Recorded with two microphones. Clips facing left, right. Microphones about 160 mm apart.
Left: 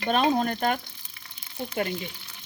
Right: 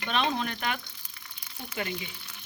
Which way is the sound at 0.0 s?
40° left (ahead or behind).